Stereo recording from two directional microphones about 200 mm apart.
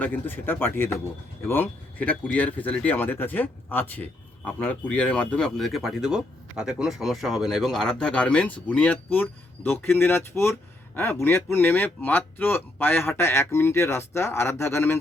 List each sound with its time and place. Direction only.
0.0 s speech: 10° left (ahead or behind)